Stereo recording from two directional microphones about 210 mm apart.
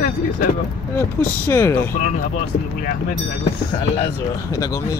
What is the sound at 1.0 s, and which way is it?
Speech, 10° left (ahead or behind).